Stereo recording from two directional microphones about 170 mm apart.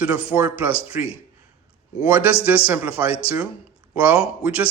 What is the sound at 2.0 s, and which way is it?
Speech, 10° right (ahead or behind).